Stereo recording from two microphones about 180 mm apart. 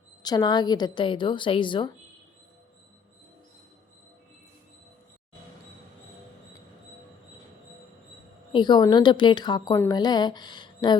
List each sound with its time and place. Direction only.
0.2 s a woman's voice: 20° left (ahead or behind)
8.5 s a woman's voice: 25° left (ahead or behind)